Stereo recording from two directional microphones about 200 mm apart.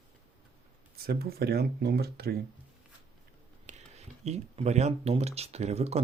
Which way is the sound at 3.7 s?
35° right (ahead or behind).